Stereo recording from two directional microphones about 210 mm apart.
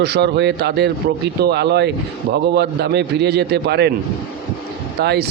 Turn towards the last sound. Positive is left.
turn(degrees=-50)  # may be behind; listen again after turning